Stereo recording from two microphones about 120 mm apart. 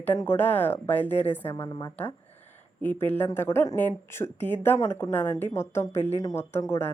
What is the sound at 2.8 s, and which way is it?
Speech, 15° left (ahead or behind).